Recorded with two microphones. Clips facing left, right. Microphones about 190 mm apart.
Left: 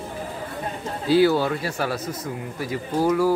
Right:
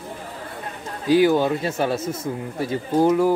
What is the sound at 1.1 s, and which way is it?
Speech, 15° right (ahead or behind).